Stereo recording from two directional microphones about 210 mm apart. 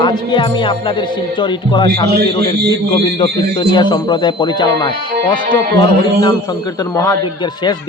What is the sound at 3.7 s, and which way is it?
Speech, 20° left (ahead or behind).